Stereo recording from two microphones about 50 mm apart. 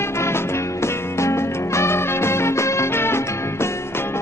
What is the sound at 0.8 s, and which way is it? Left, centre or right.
Music, left.